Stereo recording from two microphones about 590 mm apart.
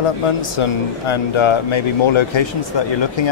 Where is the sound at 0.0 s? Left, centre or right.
Left.